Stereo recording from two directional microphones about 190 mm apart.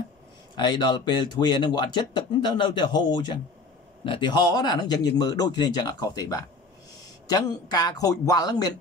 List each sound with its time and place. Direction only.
0.6 s speech: 25° left (ahead or behind)